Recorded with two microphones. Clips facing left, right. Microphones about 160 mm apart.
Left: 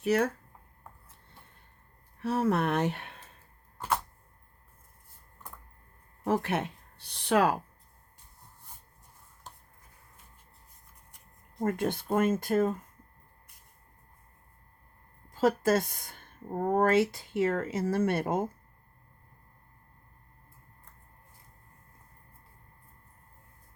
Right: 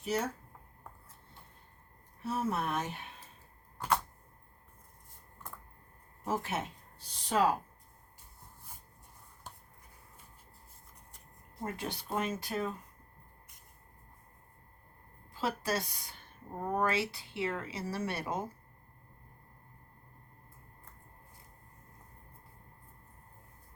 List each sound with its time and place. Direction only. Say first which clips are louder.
0.0 s speech: left 8 dB; 65° left (ahead or behind)
2.1 s speech: left 6 dB; 70° left (ahead or behind)
6.2 s speech: left 6 dB; 65° left (ahead or behind)
11.6 s speech: left 9 dB; 55° left (ahead or behind)
15.3 s speech: left 9 dB; 45° left (ahead or behind)